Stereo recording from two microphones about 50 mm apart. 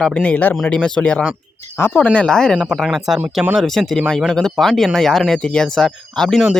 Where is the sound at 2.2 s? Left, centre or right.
Centre.